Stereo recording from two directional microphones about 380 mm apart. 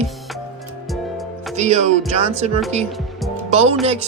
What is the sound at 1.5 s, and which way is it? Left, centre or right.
Speech, centre.